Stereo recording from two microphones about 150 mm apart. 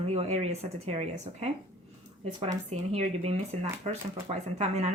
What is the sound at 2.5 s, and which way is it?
Speech, 50° right (ahead or behind).